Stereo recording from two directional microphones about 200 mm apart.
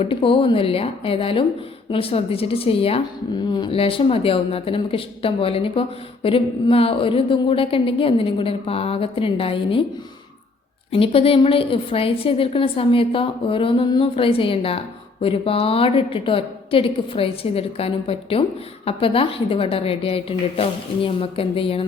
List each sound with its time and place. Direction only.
0.0 s a woman's voice: 25° left (ahead or behind)
10.9 s a woman's voice: 30° left (ahead or behind)